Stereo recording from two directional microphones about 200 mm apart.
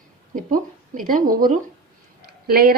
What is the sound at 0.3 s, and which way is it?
A woman's voice, 45° right (ahead or behind).